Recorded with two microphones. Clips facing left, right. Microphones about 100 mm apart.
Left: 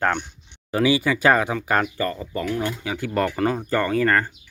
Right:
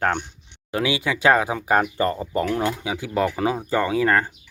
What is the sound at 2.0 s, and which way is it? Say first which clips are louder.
Speech: right 4 dB; 25° right (ahead or behind).